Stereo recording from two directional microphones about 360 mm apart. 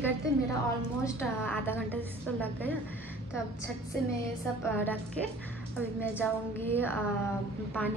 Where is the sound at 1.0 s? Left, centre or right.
Centre.